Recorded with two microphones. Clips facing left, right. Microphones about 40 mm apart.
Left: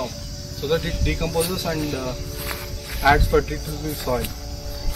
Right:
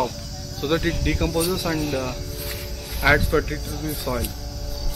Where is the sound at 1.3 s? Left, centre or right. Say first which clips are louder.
Left 1 dB; centre.